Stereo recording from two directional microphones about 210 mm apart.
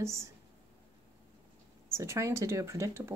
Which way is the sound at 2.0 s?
15° right (ahead or behind).